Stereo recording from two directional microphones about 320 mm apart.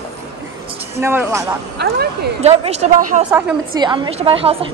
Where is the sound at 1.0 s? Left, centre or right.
Centre.